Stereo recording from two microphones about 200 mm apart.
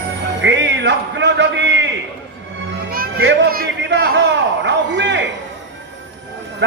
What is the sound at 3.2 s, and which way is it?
Speech, 50° right (ahead or behind).